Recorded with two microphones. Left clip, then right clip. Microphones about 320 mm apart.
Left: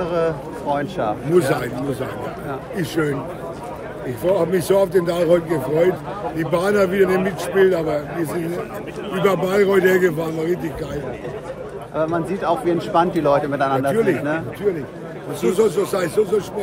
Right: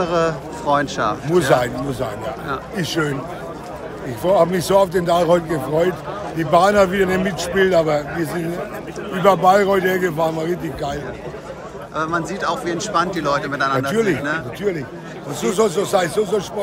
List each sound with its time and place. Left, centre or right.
0.0 s a man's voice: centre
4.4 s a man's voice: centre
9.2 s a man's voice: centre
11.9 s a man's voice: centre
15.5 s a man's voice: centre